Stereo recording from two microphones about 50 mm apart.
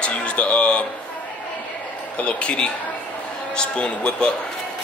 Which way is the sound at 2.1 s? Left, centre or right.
Left.